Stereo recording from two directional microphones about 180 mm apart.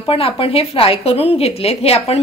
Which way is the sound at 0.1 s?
30° left (ahead or behind).